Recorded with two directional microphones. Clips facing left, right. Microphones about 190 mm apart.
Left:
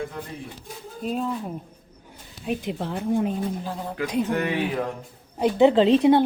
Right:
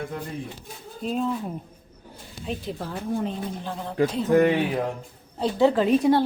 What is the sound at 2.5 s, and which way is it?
Speech, 20° left (ahead or behind).